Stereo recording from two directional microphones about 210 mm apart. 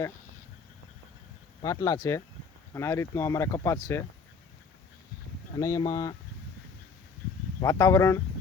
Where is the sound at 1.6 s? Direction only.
15° left (ahead or behind).